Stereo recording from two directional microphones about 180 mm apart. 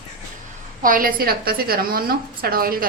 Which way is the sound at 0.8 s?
50° right (ahead or behind).